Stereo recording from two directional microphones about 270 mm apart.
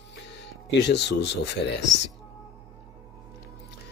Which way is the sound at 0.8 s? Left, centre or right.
Left.